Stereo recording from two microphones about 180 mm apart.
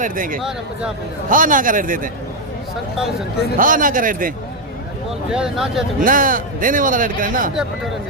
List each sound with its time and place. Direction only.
0.0 s a man's voice: 50° right (ahead or behind)
3.6 s a man's voice: 50° right (ahead or behind)
5.3 s speech: 5° right (ahead or behind)
6.0 s a man's voice: 50° right (ahead or behind)